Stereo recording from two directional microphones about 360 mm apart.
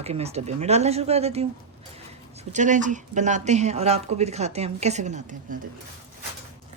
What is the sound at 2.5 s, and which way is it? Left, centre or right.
A woman's voice, right.